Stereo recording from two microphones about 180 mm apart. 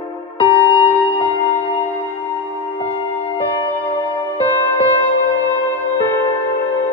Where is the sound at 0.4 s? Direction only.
25° left (ahead or behind).